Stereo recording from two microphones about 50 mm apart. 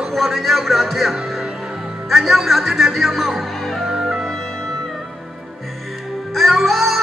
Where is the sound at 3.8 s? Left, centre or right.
Centre.